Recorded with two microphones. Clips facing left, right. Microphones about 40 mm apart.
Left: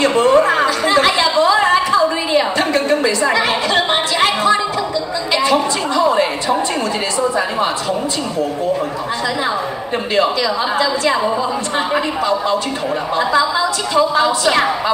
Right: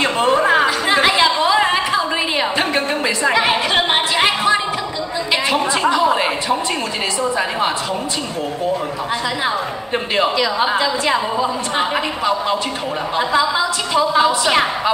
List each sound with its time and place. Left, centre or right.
0.0 s a sound: centre
10.1 s a woman's voice: centre
13.4 s a woman's voice: centre